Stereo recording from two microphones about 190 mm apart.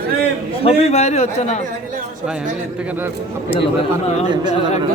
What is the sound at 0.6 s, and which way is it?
Speech, 35° left (ahead or behind).